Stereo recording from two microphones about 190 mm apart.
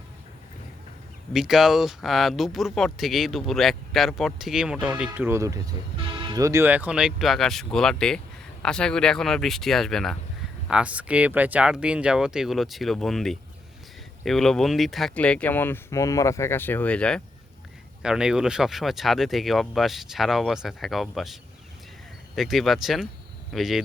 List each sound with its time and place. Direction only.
1.3 s speech: centre (ahead or behind)
22.4 s speech: centre (ahead or behind)